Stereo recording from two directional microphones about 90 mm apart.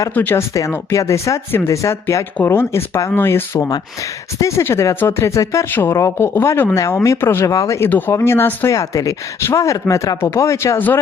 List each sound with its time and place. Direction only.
0.1 s speech: 20° left (ahead or behind)
0.7 s speech: 30° left (ahead or behind)
6.7 s speech: 35° left (ahead or behind)
7.9 s speech: 20° left (ahead or behind)
8.7 s speech: 40° left (ahead or behind)
10.8 s speech: 20° left (ahead or behind)